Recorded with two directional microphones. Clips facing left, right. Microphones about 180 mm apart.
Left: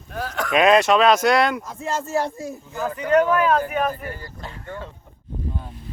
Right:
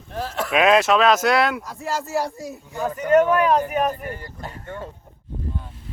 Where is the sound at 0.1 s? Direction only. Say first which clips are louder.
Right 1 dB; 30° right (ahead or behind).